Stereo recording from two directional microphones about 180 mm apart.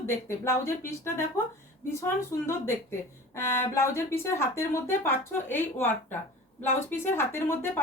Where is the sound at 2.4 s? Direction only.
15° left (ahead or behind).